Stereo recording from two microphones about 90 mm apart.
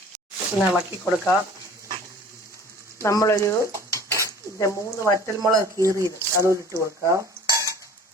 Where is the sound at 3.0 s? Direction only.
30° left (ahead or behind).